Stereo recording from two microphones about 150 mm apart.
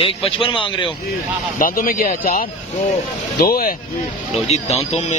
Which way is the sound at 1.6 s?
70° left (ahead or behind).